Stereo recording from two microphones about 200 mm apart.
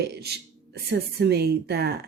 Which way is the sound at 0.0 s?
55° right (ahead or behind).